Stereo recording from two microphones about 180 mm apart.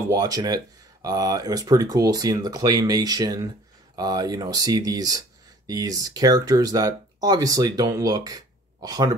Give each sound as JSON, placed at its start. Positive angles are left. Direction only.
{"t": 0.1, "sound": "speech", "side_deg": -20}